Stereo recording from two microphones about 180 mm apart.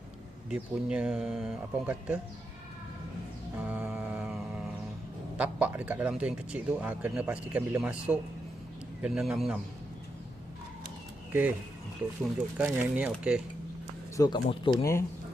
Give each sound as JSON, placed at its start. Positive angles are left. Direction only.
{"t": 0.5, "sound": "speech", "side_deg": -5}
{"t": 3.6, "sound": "mantra", "side_deg": -10}
{"t": 5.4, "sound": "speech", "side_deg": -10}
{"t": 11.3, "sound": "speech", "side_deg": -10}
{"t": 14.2, "sound": "speech", "side_deg": 25}
{"t": 14.8, "sound": "speech", "side_deg": 15}